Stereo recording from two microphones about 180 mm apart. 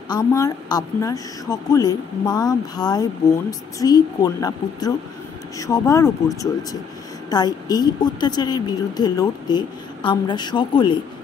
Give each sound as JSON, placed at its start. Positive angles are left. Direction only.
{"t": 0.1, "sound": "a woman's voice", "side_deg": 20}